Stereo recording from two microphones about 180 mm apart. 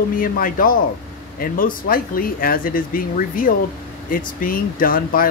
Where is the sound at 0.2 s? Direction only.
50° left (ahead or behind).